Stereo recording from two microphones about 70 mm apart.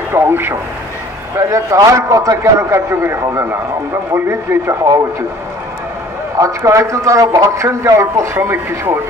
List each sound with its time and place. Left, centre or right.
0.1 s speech: right
1.3 s a man's voice: right
6.3 s a man's voice: right